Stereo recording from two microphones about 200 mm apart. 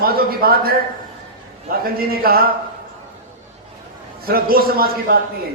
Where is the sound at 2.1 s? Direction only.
50° right (ahead or behind).